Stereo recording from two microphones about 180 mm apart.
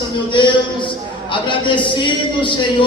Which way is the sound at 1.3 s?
25° left (ahead or behind).